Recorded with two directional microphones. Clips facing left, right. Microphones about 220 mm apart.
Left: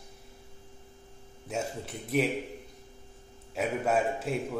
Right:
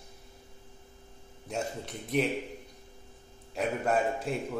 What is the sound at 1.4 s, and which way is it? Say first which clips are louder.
Speech: left 1 dB; 5° left (ahead or behind).